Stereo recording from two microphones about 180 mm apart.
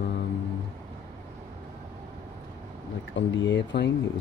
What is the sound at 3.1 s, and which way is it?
Speech, 85° left.